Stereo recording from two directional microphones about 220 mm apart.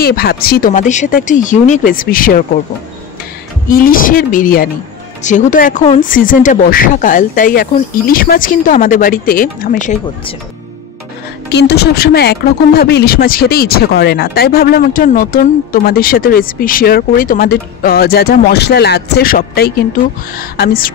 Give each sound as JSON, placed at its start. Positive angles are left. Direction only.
{"t": 0.0, "sound": "speech", "side_deg": 45}
{"t": 3.6, "sound": "speech", "side_deg": 40}
{"t": 11.5, "sound": "speech", "side_deg": 50}